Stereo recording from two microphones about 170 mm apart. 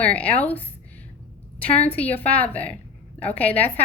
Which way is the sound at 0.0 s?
10° left (ahead or behind).